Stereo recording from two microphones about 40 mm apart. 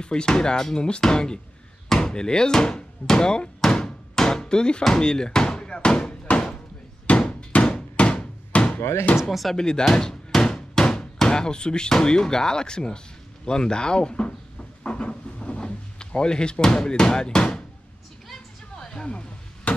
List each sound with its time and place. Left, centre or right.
0.0 s speech: left
1.9 s hammer: centre
4.8 s speech: centre
7.2 s hammer: left
8.5 s a sound: left
9.3 s speech: centre
9.6 s speech: left
9.9 s hammer: centre
13.5 s a sound: left
18.3 s music: centre
19.0 s chop: left